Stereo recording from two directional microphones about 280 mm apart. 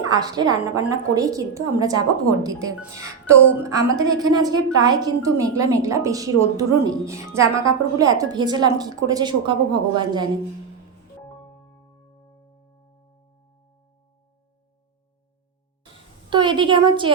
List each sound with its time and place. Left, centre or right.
0.0 s a woman's voice: centre
16.3 s a woman's voice: centre